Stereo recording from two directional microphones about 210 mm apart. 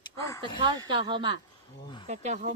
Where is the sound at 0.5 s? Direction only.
20° right (ahead or behind).